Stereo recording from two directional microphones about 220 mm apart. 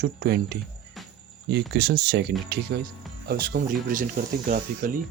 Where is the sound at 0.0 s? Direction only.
50° right (ahead or behind).